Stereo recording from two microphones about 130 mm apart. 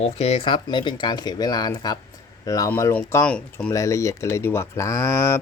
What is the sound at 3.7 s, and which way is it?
Speech, 25° left (ahead or behind).